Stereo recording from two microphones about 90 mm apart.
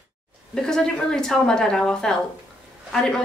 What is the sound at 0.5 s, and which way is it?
A woman's voice, 5° left (ahead or behind).